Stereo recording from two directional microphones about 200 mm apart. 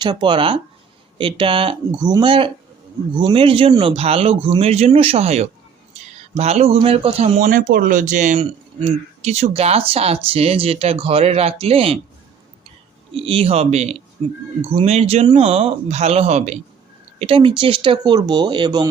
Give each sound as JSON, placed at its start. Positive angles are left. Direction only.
{"t": 0.0, "sound": "speech", "side_deg": -20}
{"t": 13.1, "sound": "speech", "side_deg": -25}